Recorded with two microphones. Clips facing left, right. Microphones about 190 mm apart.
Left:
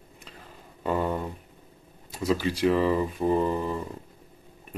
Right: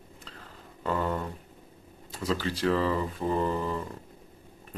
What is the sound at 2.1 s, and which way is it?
Speech, 15° left (ahead or behind).